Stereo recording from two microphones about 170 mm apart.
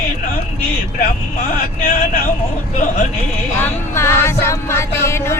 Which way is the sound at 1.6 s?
55° left (ahead or behind).